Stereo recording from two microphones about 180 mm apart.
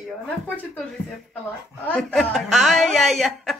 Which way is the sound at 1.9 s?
5° left (ahead or behind).